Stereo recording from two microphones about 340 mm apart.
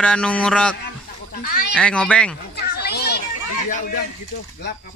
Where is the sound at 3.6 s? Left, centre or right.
Left.